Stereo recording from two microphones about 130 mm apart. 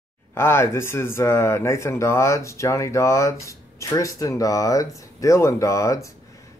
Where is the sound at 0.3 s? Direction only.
20° left (ahead or behind).